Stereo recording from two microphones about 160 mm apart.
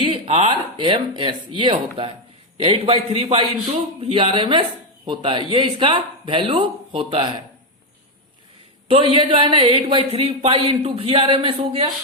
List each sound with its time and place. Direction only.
0.0 s speech: 40° right (ahead or behind)
8.9 s speech: 35° right (ahead or behind)